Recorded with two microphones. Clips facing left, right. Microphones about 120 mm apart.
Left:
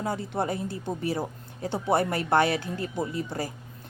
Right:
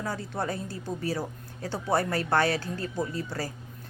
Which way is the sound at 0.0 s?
25° left (ahead or behind).